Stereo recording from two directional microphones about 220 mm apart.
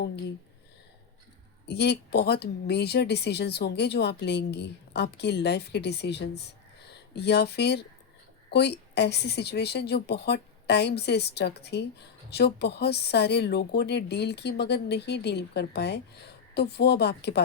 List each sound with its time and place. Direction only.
1.6 s speech: 50° left (ahead or behind)